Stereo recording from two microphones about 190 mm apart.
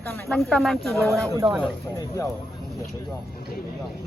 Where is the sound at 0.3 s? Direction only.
Centre (ahead or behind).